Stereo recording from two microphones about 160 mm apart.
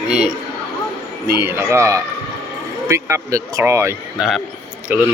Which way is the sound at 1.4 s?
15° right (ahead or behind).